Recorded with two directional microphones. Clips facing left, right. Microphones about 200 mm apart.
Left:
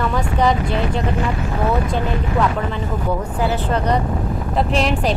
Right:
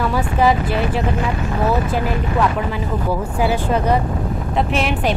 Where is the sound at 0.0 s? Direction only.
5° right (ahead or behind).